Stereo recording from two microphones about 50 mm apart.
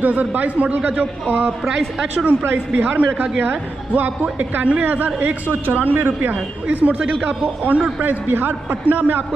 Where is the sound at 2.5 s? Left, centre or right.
Right.